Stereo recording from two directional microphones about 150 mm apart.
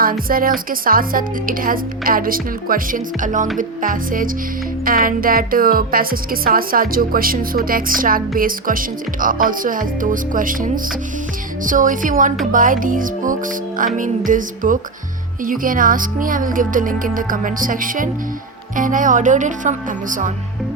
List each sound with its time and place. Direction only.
0.0 s speech: 70° right (ahead or behind)